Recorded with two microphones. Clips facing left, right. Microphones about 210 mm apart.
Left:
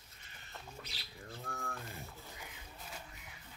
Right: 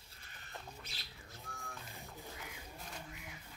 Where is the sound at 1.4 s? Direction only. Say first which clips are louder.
Left 7 dB; 60° left (ahead or behind).